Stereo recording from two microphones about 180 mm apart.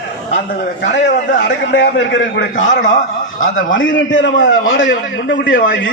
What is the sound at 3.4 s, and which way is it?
A man's voice, 90° left.